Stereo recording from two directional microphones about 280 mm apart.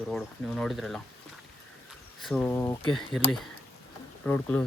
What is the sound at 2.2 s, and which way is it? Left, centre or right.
Speech, centre.